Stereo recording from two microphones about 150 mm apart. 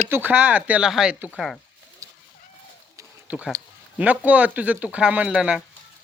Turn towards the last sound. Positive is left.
turn(degrees=-5)  # may be behind; listen again after turning